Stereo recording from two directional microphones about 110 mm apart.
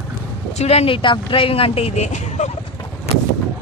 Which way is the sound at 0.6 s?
70° left (ahead or behind).